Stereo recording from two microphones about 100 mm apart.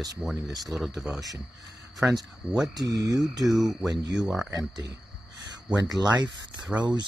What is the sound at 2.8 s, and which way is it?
Speech, 40° right (ahead or behind).